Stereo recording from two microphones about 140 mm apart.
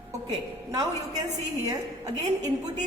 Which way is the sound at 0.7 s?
25° right (ahead or behind).